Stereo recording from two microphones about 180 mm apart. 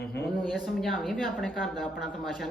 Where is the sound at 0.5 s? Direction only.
Centre (ahead or behind).